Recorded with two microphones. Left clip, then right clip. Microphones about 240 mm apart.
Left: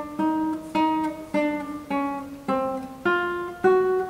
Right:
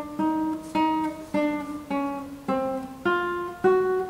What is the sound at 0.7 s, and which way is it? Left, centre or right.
Music, centre.